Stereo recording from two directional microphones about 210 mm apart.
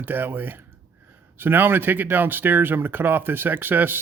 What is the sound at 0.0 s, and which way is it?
Speech, 10° right (ahead or behind).